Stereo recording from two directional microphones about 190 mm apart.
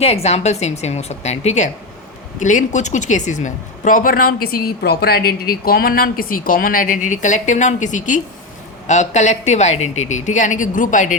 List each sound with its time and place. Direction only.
0.0 s a woman's voice: 35° left (ahead or behind)